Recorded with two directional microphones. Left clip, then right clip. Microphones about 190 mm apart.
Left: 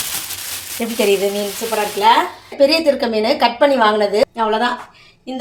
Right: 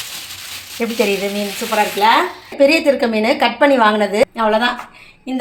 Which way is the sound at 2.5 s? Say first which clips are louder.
Right 1 dB; 5° left (ahead or behind).